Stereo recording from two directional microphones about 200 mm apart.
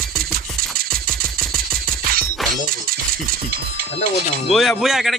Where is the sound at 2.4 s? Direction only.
Centre (ahead or behind).